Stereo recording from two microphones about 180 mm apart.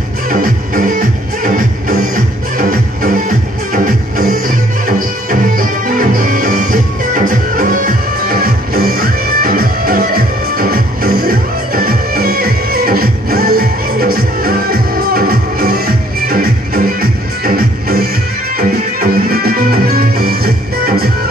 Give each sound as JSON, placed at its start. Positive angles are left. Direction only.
{"t": 0.3, "sound": "music", "side_deg": -50}